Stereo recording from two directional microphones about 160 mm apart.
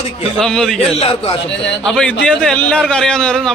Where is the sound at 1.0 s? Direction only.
35° left (ahead or behind).